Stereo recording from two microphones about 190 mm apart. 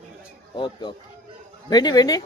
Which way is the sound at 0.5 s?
25° left (ahead or behind).